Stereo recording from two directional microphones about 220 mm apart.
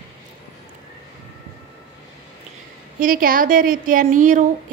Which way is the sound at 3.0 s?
40° right (ahead or behind).